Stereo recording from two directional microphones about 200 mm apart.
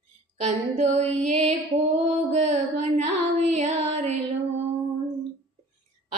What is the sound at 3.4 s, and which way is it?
Music, 35° right (ahead or behind).